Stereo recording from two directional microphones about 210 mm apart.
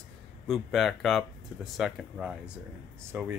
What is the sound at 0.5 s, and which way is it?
Speech, centre (ahead or behind).